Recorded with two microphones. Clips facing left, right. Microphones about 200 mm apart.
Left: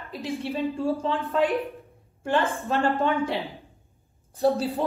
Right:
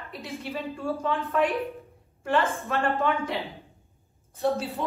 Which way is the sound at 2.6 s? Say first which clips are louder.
Left 2 dB; 30° left (ahead or behind).